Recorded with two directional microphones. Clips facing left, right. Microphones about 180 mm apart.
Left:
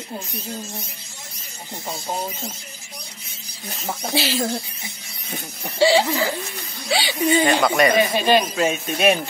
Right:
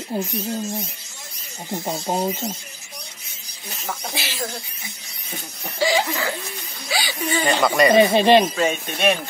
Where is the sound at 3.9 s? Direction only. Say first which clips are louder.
Left 7 dB; 30° left (ahead or behind).